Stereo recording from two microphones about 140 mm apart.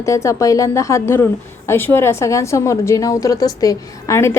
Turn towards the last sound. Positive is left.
turn(degrees=20)  # may be behind; listen again after turning